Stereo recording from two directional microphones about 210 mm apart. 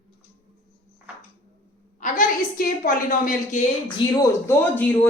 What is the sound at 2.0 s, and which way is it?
A woman's voice, 40° left (ahead or behind).